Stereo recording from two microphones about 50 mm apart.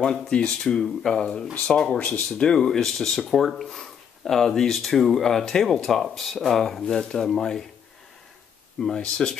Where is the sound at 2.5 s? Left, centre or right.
Centre.